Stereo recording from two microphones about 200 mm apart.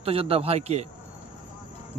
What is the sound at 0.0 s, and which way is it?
Speech, 30° right (ahead or behind).